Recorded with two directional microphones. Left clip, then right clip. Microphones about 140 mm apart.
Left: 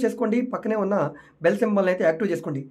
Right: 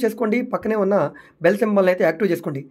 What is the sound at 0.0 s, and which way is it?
Speech, 35° right (ahead or behind).